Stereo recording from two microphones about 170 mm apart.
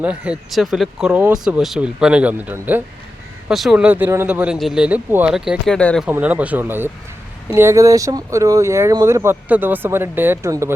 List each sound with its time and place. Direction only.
0.0 s speech: 5° right (ahead or behind)
6.1 s speech: 10° right (ahead or behind)